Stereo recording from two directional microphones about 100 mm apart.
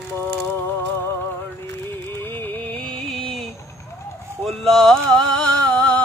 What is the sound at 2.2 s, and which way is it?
Music, 20° left (ahead or behind).